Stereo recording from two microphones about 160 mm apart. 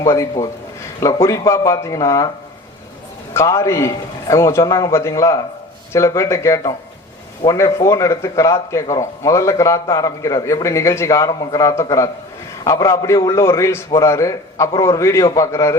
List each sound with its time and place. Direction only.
0.0 s a man's voice: 20° left (ahead or behind)
3.3 s a man's voice: 20° left (ahead or behind)